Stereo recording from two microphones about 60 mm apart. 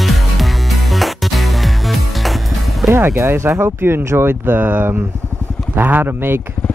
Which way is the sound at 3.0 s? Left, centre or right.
Right.